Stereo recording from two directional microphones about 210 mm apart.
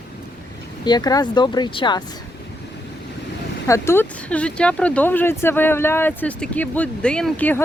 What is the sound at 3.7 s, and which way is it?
Speech, 10° left (ahead or behind).